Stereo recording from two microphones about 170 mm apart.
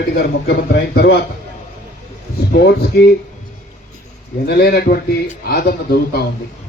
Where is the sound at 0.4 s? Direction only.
70° left (ahead or behind).